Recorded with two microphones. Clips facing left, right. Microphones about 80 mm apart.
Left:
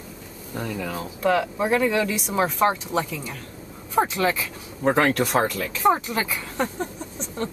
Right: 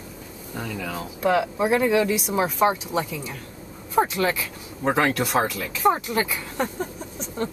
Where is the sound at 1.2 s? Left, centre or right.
Centre.